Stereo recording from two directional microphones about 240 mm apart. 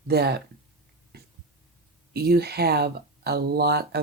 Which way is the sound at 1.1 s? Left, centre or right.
Right.